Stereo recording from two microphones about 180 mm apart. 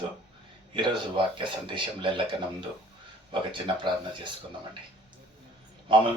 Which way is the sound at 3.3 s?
25° right (ahead or behind).